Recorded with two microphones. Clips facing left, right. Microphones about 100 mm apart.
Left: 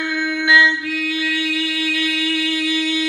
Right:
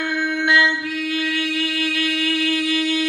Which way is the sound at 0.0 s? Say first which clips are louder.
Even; 45° right (ahead or behind).